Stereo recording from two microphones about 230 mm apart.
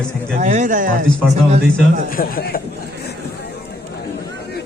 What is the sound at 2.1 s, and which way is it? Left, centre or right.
Speech, left.